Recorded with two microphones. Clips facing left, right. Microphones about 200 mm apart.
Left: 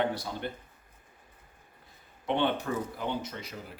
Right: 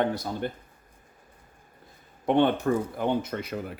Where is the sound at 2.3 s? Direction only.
45° right (ahead or behind).